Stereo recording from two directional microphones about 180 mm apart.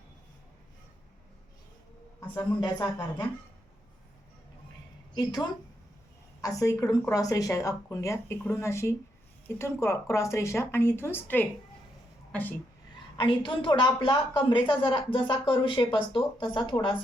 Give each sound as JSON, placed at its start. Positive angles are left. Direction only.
{"t": 2.3, "sound": "speech", "side_deg": 20}
{"t": 5.1, "sound": "a woman's voice", "side_deg": 25}
{"t": 13.1, "sound": "a woman's voice", "side_deg": 30}